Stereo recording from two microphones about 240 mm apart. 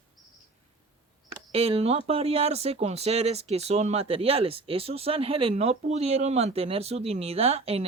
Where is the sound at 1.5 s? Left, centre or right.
Right.